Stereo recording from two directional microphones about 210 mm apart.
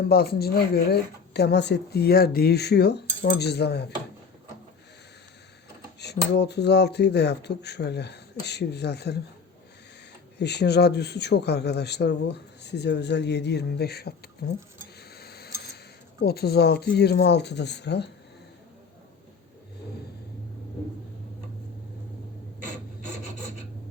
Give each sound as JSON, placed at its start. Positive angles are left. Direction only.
{"t": 0.1, "sound": "speech", "side_deg": 50}
{"t": 6.0, "sound": "speech", "side_deg": 55}
{"t": 10.3, "sound": "speech", "side_deg": 55}
{"t": 15.1, "sound": "a sound", "side_deg": 50}
{"t": 16.2, "sound": "speech", "side_deg": 50}